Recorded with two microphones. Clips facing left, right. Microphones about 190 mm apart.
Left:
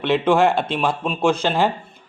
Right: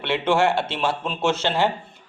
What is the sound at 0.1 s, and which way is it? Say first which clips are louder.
Speech: left 3 dB; 15° left (ahead or behind).